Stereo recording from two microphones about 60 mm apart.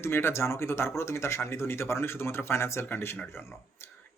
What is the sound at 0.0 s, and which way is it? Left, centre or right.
Speech, left.